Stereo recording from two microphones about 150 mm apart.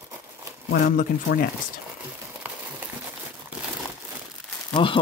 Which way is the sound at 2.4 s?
10° right (ahead or behind).